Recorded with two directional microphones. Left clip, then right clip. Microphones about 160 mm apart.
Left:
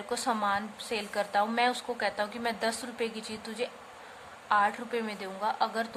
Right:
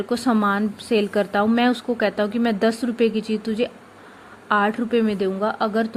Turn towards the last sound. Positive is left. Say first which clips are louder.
# right 8 dB
turn(degrees=-35)  # may be behind; listen again after turning